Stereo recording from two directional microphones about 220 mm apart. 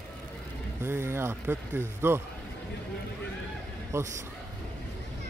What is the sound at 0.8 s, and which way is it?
Speech, 10° right (ahead or behind).